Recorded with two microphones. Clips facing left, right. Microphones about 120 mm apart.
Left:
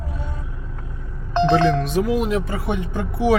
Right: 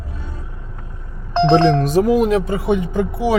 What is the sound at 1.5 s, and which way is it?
Speech, 45° right (ahead or behind).